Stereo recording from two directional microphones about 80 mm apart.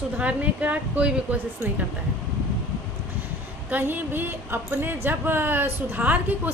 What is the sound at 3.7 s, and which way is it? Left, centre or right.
A woman's voice, right.